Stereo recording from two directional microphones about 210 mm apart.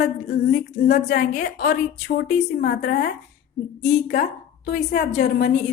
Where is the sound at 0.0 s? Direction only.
50° left (ahead or behind).